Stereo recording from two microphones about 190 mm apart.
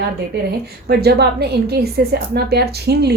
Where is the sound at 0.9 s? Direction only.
60° right (ahead or behind).